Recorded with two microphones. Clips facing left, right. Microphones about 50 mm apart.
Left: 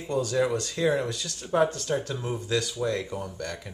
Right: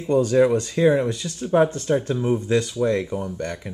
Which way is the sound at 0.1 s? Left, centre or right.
Right.